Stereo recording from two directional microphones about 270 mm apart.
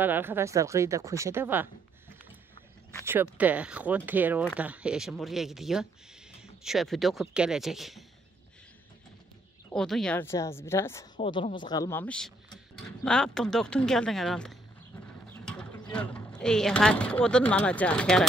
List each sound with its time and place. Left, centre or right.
0.0 s speech: centre
3.1 s speech: centre
9.8 s a woman's voice: centre
11.1 s a woman's voice: left; by 18.2 s centre